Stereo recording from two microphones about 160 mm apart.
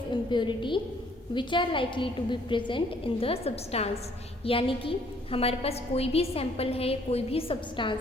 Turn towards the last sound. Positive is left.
turn(degrees=30)  # may be behind; listen again after turning